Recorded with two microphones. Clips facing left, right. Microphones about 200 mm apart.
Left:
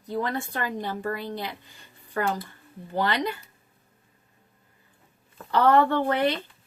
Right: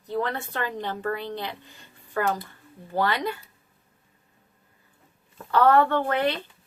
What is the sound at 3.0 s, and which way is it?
Speech, 20° left (ahead or behind).